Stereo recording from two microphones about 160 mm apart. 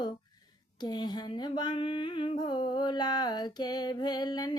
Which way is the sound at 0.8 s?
25° left (ahead or behind).